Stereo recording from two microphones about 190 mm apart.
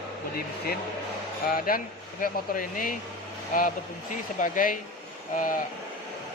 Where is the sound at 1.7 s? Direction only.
50° left (ahead or behind).